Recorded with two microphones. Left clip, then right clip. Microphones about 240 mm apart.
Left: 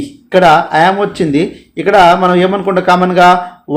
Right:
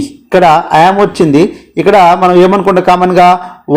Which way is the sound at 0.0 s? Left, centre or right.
Right.